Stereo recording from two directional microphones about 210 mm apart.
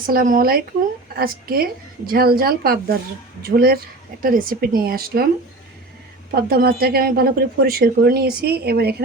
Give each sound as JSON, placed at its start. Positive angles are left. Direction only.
{"t": 0.0, "sound": "a woman's voice", "side_deg": -40}
{"t": 6.3, "sound": "a woman's voice", "side_deg": -45}